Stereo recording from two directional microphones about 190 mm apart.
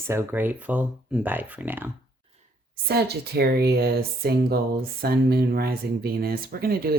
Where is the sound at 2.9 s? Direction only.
60° right (ahead or behind).